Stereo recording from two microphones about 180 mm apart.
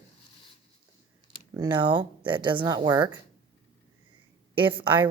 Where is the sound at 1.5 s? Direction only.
25° right (ahead or behind).